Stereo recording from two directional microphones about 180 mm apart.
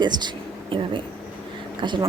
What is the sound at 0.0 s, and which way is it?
A woman's voice, 25° right (ahead or behind).